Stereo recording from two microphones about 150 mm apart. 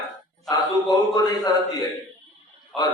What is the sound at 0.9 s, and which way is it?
A man's voice, 25° left (ahead or behind).